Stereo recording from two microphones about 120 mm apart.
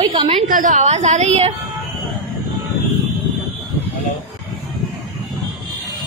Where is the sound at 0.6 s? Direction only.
80° right; by 1.5 s 65° right (ahead or behind).